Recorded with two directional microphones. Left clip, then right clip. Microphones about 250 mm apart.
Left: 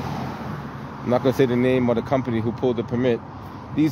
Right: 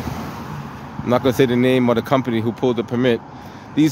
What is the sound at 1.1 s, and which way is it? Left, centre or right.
Speech, centre.